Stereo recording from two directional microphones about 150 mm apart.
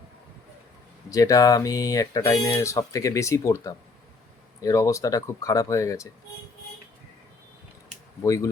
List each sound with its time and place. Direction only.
1.1 s speech: 25° left (ahead or behind)
8.2 s speech: 20° left (ahead or behind)